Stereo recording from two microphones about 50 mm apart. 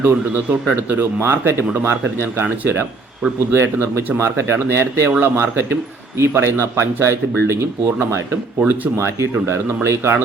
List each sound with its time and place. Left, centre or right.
0.0 s a man's voice: right
1.3 s a man's voice: right
9.0 s speech: right